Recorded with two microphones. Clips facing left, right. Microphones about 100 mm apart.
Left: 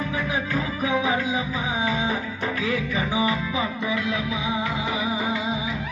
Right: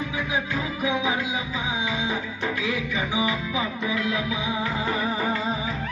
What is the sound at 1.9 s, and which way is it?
Music, 40° left (ahead or behind).